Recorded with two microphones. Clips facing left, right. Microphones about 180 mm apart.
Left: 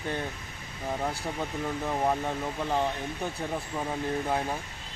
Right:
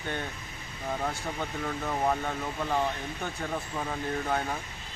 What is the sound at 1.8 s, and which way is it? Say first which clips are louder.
Speech: left 1 dB; 10° left (ahead or behind).